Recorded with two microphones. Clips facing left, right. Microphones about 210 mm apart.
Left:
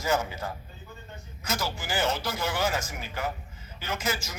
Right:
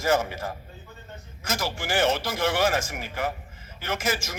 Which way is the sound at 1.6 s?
90° right.